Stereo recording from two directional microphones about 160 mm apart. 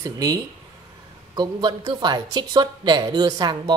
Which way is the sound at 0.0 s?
20° right (ahead or behind).